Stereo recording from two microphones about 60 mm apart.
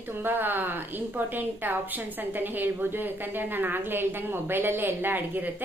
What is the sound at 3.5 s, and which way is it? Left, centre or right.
A woman's voice, right.